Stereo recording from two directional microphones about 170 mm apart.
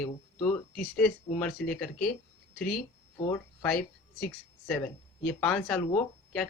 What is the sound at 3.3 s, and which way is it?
Speech, 15° left (ahead or behind).